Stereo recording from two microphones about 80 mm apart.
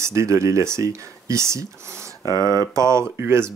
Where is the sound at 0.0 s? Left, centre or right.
Right.